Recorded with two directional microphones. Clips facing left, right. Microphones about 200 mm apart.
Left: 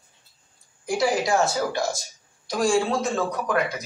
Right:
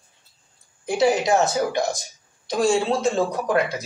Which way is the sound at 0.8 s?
25° right (ahead or behind).